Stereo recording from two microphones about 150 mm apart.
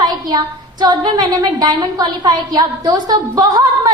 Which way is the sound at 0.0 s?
30° right (ahead or behind).